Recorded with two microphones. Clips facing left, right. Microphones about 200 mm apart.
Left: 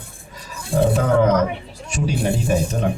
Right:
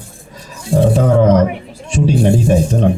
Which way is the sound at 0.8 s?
30° right (ahead or behind).